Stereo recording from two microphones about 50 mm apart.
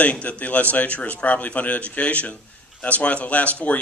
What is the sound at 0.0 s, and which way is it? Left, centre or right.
A man's voice, left.